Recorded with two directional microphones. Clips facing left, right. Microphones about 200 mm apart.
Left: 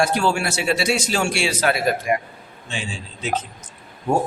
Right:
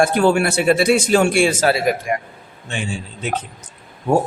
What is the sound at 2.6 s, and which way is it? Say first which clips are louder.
Speech: right 5 dB; 60° right (ahead or behind).